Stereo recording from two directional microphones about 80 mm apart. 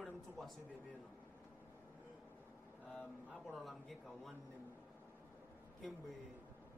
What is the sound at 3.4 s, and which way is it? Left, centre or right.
Speech, centre.